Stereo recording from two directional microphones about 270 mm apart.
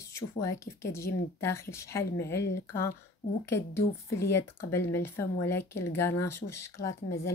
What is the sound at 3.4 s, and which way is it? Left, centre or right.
Speech, centre.